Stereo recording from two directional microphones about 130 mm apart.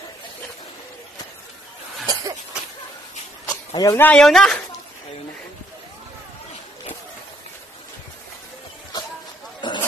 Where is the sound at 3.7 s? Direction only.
25° left (ahead or behind).